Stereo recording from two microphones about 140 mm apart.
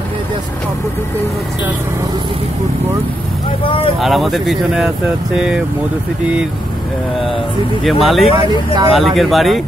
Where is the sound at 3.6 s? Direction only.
40° left (ahead or behind).